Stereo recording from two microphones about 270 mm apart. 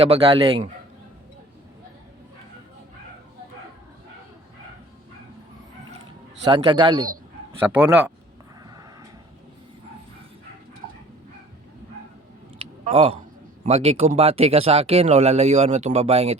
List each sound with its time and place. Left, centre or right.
0.0 s speech: right
6.5 s speech: centre
12.9 s speech: right